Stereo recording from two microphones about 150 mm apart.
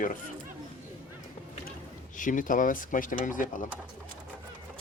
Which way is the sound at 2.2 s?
60° left (ahead or behind).